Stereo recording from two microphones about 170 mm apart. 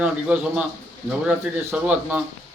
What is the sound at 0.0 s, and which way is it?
Speech, 5° right (ahead or behind).